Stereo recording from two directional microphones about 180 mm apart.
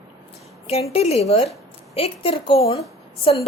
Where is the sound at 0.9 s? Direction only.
35° left (ahead or behind).